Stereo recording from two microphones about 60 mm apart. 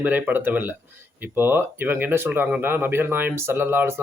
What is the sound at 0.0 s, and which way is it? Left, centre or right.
Speech, right.